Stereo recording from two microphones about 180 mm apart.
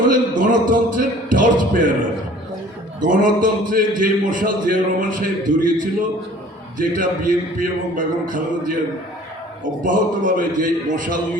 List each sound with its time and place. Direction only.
0.1 s a man's voice: 50° right (ahead or behind)
9.8 s a man's voice: 50° right (ahead or behind)